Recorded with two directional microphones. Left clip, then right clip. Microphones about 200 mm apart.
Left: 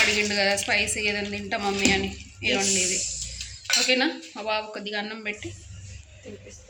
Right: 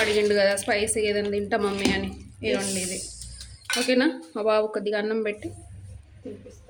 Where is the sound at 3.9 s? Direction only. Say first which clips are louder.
Right 1 dB; 60° right (ahead or behind).